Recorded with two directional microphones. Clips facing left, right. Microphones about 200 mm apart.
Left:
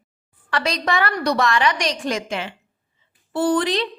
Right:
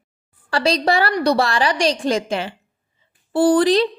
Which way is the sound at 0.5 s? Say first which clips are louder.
Right 4 dB; 30° right (ahead or behind).